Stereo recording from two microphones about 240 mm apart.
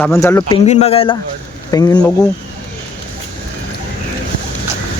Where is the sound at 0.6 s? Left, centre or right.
Left.